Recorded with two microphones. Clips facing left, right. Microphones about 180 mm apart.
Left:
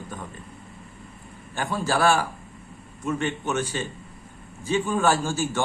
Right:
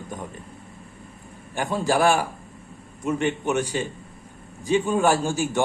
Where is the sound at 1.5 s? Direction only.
15° right (ahead or behind).